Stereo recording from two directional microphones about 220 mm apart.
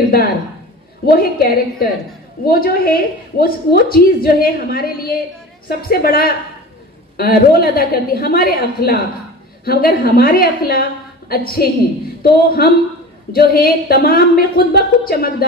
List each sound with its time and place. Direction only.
1.0 s a woman's voice: 45° left (ahead or behind)